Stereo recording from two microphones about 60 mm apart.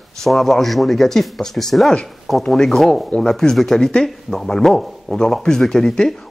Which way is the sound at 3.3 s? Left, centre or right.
Centre.